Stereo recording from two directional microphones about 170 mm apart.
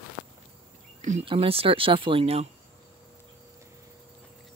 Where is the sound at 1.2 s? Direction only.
30° right (ahead or behind).